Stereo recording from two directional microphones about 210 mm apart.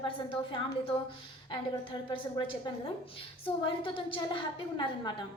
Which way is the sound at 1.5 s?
20° left (ahead or behind).